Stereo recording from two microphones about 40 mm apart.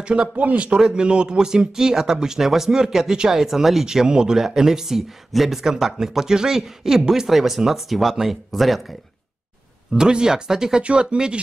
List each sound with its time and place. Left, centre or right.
0.0 s speech: right
0.4 s speech: right
0.7 s speech: centre
9.9 s speech: centre
10.8 s speech: right